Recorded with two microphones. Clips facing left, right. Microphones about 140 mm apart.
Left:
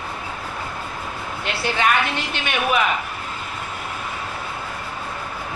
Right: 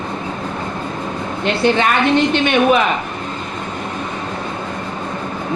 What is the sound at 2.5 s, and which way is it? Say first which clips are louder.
Speech: right 7 dB; 25° right (ahead or behind).